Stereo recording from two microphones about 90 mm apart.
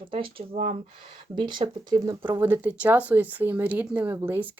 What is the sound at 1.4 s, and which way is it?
Speech, 60° right (ahead or behind).